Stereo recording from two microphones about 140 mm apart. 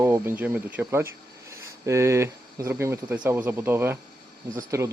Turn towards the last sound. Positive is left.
turn(degrees=-20)  # may be behind; listen again after turning